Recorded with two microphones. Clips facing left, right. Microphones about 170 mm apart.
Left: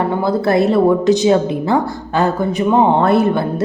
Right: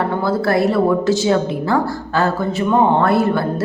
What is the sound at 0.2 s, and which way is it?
A woman's voice, 20° left (ahead or behind).